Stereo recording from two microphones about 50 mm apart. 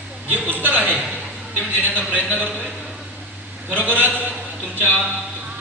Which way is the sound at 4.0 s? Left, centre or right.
Right.